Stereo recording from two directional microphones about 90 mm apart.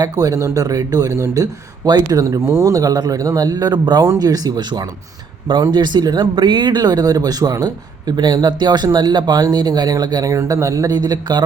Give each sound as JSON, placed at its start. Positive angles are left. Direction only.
{"t": 0.0, "sound": "speech", "side_deg": -40}